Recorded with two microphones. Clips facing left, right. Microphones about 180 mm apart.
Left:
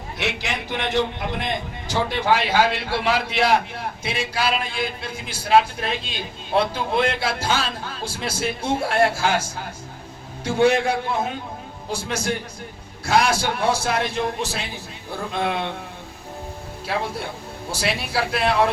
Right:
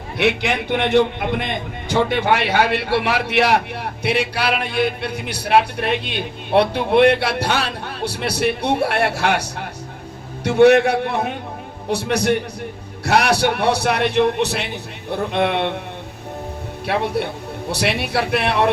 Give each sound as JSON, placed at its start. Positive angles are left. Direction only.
{"t": 0.2, "sound": "a man's voice", "side_deg": -60}
{"t": 16.8, "sound": "a man's voice", "side_deg": -65}